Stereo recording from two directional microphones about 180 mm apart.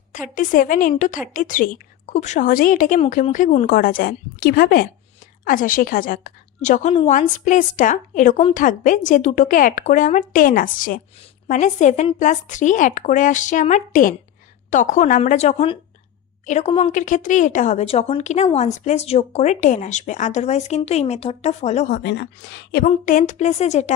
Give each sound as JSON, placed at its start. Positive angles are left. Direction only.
{"t": 0.1, "sound": "speech", "side_deg": 45}
{"t": 3.8, "sound": "a woman's voice", "side_deg": 55}
{"t": 21.9, "sound": "speech", "side_deg": 75}
{"t": 22.9, "sound": "speech", "side_deg": 45}